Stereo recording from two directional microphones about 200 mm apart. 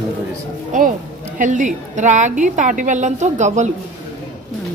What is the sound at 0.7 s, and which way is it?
A woman's voice, 40° right (ahead or behind).